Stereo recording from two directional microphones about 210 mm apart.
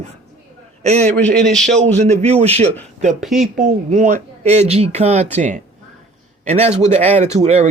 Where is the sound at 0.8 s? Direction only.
30° right (ahead or behind).